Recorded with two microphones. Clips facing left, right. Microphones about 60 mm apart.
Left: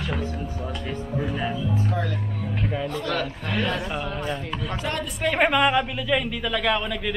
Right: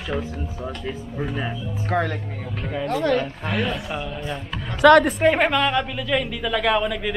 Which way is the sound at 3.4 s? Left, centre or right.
Centre.